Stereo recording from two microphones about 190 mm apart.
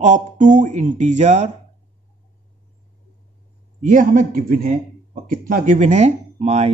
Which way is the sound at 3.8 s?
45° right (ahead or behind).